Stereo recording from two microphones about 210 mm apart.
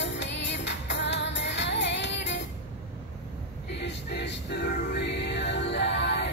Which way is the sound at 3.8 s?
55° left (ahead or behind).